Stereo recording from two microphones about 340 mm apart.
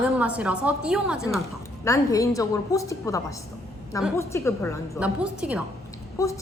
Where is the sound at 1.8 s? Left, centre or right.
Centre.